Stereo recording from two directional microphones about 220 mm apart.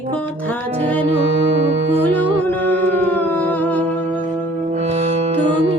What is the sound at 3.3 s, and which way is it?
Humming, 10° left (ahead or behind).